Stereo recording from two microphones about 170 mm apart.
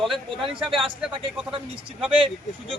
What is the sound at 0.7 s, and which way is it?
Speech, 30° right (ahead or behind).